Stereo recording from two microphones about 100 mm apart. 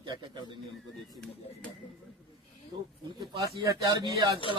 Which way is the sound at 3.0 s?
45° right (ahead or behind).